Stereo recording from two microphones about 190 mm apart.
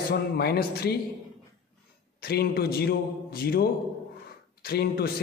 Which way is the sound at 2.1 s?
55° left (ahead or behind).